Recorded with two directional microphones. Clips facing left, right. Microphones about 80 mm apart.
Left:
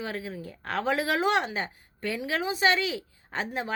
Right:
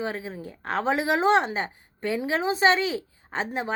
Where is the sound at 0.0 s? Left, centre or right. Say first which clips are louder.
Right 3 dB; right.